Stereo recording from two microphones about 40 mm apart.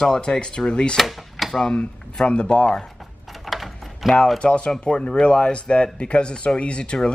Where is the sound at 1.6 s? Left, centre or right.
Left.